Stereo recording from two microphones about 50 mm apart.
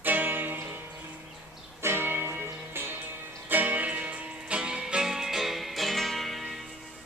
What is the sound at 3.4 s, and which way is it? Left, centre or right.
Music, right.